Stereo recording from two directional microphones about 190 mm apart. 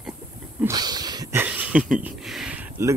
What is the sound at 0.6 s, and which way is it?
Speech, 20° right (ahead or behind).